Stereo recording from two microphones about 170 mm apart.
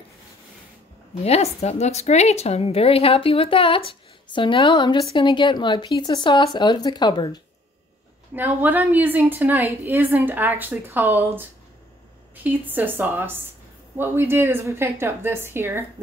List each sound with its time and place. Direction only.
1.2 s a woman's voice: 40° left (ahead or behind)
8.4 s a woman's voice: 10° right (ahead or behind)
12.4 s a woman's voice: 10° right (ahead or behind)